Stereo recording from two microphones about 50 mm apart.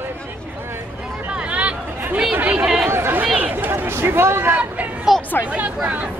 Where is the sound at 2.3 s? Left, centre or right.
Right.